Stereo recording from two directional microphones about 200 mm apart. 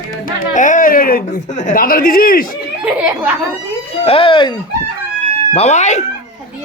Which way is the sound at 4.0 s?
30° left (ahead or behind).